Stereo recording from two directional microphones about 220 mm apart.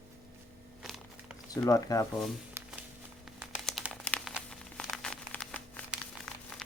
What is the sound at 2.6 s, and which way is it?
Music, 10° right (ahead or behind).